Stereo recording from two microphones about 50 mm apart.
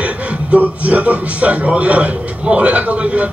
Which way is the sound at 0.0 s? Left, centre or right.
Right.